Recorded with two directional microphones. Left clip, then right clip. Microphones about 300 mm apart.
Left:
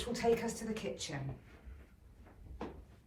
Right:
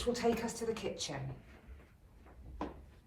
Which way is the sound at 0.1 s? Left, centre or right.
Centre.